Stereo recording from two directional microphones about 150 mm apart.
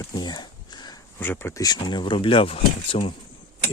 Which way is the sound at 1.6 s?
30° left (ahead or behind).